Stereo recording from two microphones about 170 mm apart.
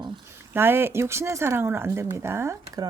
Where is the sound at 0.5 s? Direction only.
15° right (ahead or behind).